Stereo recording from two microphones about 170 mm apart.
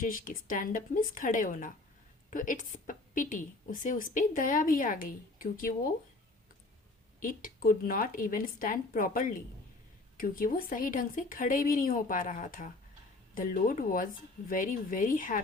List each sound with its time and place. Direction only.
0.0 s a woman's voice: 50° left (ahead or behind)
7.2 s a woman's voice: 55° left (ahead or behind)